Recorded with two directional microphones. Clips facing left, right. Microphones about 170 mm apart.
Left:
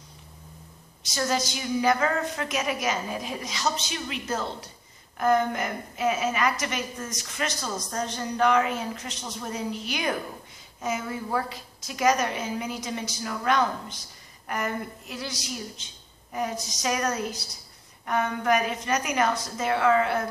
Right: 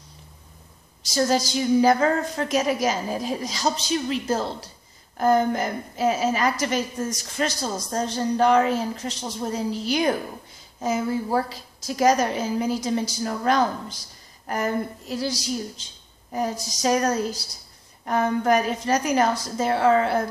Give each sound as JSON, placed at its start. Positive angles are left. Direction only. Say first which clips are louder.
{"t": 1.0, "sound": "a woman's voice", "louder": "right 5 dB", "side_deg": -35}